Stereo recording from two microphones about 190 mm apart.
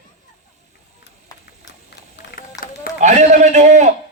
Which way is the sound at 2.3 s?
60° left (ahead or behind).